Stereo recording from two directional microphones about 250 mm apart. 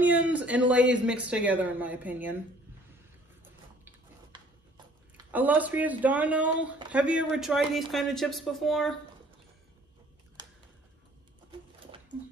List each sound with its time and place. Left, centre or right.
0.0 s a man's voice: centre
5.1 s speech: centre
10.4 s typing: centre